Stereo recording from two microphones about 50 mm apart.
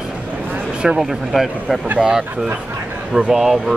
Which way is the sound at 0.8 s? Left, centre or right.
Centre.